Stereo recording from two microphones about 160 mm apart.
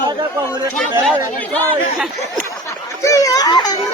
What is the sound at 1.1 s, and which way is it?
Speech, 10° left (ahead or behind).